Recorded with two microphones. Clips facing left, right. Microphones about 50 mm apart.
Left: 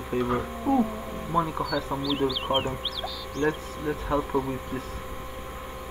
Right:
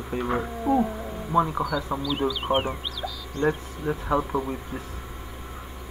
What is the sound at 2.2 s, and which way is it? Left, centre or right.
Speech, centre.